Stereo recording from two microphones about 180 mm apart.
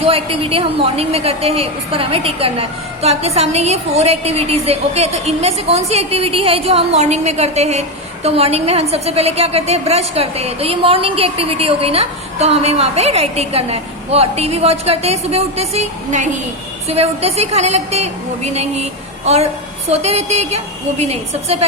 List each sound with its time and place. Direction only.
0.0 s a woman's voice: 30° right (ahead or behind)